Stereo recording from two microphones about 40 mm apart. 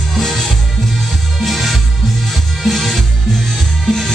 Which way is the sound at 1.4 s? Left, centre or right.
Centre.